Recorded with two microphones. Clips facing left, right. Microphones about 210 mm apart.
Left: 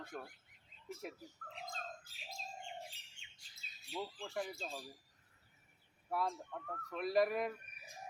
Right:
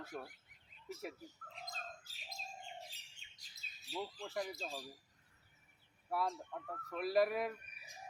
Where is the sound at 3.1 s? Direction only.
40° right (ahead or behind).